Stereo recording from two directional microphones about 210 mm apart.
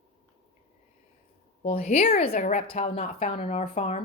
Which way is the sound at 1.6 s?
30° left (ahead or behind).